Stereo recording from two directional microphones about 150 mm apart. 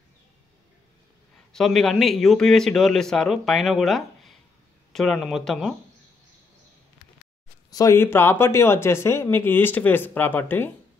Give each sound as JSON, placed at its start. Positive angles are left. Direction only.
{"t": 1.5, "sound": "a man's voice", "side_deg": 5}
{"t": 7.7, "sound": "speech", "side_deg": 20}